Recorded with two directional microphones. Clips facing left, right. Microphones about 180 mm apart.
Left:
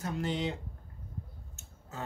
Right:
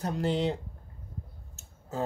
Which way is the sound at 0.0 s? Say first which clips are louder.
Right 5 dB; 35° right (ahead or behind).